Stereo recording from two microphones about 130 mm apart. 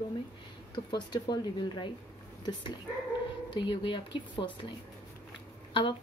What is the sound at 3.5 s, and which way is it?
A woman's voice, 40° left (ahead or behind).